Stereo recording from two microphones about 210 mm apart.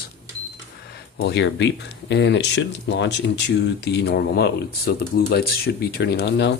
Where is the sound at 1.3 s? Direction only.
55° left (ahead or behind).